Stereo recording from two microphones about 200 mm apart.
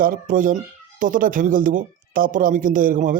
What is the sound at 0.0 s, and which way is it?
Speech, 40° right (ahead or behind).